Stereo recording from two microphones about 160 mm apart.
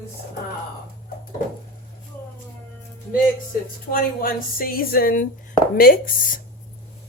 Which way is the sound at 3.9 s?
65° left (ahead or behind).